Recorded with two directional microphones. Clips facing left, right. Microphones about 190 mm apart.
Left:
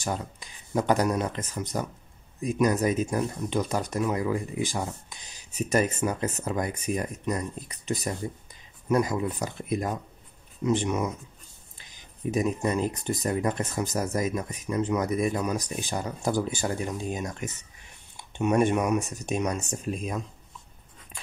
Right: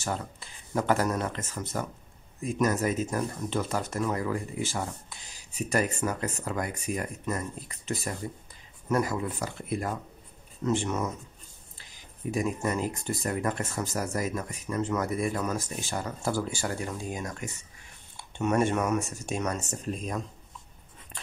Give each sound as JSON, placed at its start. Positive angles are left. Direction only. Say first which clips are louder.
{"t": 0.0, "sound": "speech", "louder": "left 2 dB", "side_deg": 15}
{"t": 21.1, "sound": "writing", "louder": "even", "side_deg": 0}